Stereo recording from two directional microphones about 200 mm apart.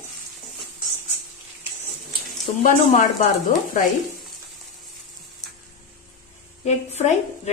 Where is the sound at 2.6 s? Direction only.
40° left (ahead or behind).